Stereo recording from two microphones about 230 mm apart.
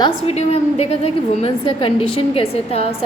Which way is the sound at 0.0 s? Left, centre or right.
Left.